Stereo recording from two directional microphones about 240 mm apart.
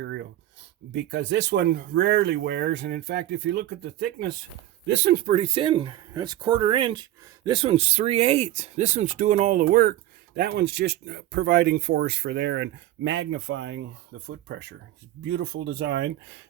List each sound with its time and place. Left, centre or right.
0.0 s a sound: right
0.9 s speech: right
5.2 s speech: right